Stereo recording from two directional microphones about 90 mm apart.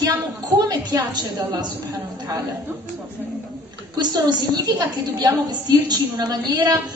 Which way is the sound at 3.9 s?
50° right (ahead or behind).